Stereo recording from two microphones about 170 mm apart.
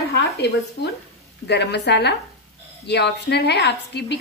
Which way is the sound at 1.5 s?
85° left.